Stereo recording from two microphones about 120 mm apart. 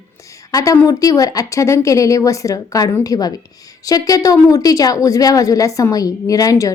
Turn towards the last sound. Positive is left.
turn(degrees=30)  # may be behind; listen again after turning